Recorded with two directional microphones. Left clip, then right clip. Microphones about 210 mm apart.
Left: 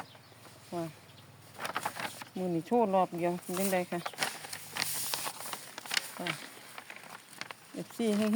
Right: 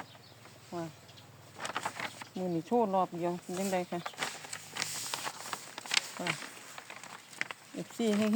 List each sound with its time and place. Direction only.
0.7 s speech: 25° left (ahead or behind)
1.5 s vehicle: 20° left (ahead or behind)
2.4 s snake: 10° left (ahead or behind)
7.3 s a sound: centre (ahead or behind)